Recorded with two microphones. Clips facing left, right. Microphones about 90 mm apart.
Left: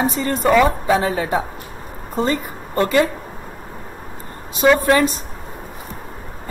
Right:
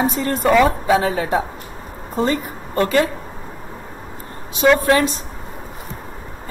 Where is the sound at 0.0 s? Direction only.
Centre (ahead or behind).